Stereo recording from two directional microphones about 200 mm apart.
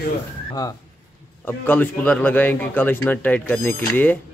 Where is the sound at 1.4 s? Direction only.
10° left (ahead or behind).